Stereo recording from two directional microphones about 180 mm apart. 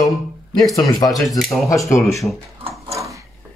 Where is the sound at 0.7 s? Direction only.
20° left (ahead or behind).